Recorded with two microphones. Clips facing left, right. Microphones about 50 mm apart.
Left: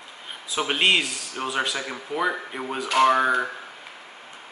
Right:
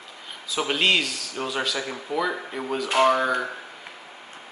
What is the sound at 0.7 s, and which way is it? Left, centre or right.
Speech, left.